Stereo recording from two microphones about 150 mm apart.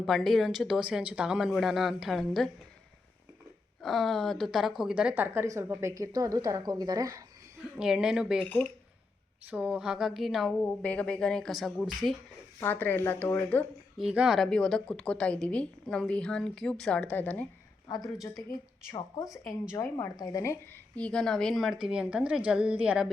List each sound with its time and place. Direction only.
0.0 s a woman's voice: centre (ahead or behind)
3.8 s a woman's voice: centre (ahead or behind); by 7.3 s 25° right (ahead or behind)
7.8 s a woman's voice: 5° right (ahead or behind)
8.4 s speech: 10° left (ahead or behind)
9.5 s a woman's voice: 10° right (ahead or behind)
10.6 s a woman's voice: 10° left (ahead or behind)
12.5 s speech: 15° left (ahead or behind)
14.0 s a woman's voice: 5° right (ahead or behind); by 17.5 s 10° left (ahead or behind)
17.9 s a woman's voice: 25° left (ahead or behind)
20.9 s a woman's voice: 5° left (ahead or behind)